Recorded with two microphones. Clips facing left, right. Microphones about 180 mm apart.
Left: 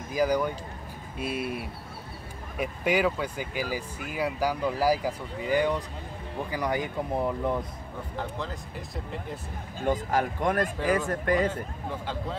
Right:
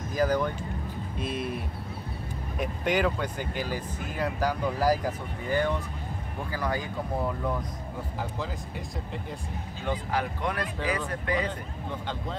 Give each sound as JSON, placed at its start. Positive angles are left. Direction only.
{"t": 0.1, "sound": "speech", "side_deg": 10}
{"t": 2.6, "sound": "speech", "side_deg": 5}
{"t": 9.8, "sound": "speech", "side_deg": 45}